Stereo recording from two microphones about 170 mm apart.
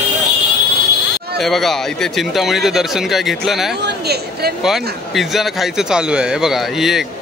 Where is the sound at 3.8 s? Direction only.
70° right (ahead or behind).